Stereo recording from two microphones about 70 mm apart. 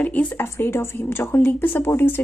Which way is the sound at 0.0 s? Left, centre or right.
Left.